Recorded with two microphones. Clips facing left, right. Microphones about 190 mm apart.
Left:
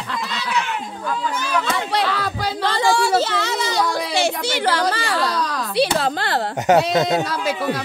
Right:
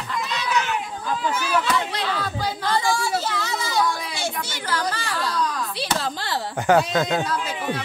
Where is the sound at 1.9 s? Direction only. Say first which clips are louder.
Left 5 dB; 75° left (ahead or behind); by 6.4 s 60° left (ahead or behind).